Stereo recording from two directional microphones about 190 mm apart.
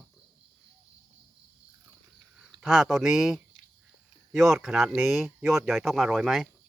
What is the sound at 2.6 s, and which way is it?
Speech, centre (ahead or behind).